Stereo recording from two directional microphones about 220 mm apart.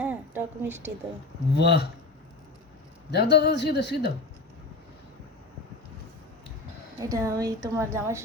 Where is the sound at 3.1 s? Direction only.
50° left (ahead or behind).